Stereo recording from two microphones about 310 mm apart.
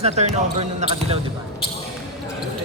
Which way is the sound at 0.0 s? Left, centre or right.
Right.